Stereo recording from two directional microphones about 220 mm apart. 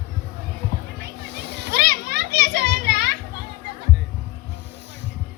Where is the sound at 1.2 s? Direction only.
50° right (ahead or behind).